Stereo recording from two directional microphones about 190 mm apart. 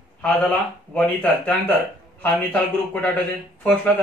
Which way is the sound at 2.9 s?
10° left (ahead or behind).